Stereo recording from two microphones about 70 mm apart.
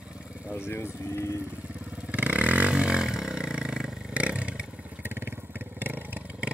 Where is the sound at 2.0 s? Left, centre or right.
Right.